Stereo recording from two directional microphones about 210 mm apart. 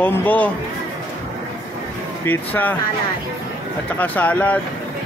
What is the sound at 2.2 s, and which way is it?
Speech, 10° left (ahead or behind).